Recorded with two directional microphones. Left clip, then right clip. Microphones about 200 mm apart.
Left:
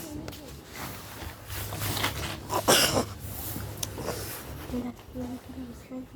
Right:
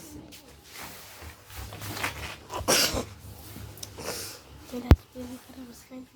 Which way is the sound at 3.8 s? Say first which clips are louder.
Left 7 dB; 25° left (ahead or behind).